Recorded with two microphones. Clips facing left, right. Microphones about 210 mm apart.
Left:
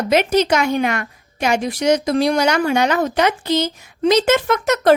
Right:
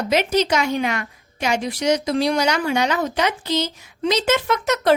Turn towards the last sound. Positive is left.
turn(degrees=50)  # may be behind; listen again after turning